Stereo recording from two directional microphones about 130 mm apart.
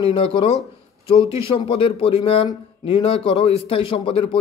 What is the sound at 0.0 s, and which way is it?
Speech, 40° left (ahead or behind).